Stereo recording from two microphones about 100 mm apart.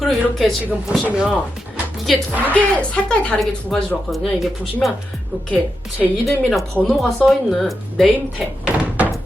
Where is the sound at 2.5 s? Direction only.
10° left (ahead or behind).